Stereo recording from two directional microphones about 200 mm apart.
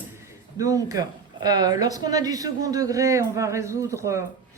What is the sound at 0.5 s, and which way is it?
Speech, 15° right (ahead or behind).